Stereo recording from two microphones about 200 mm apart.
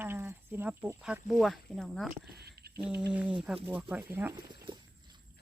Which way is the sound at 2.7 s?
5° right (ahead or behind).